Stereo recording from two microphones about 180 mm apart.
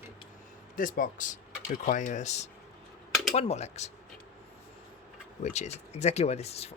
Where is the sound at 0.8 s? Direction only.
50° left (ahead or behind).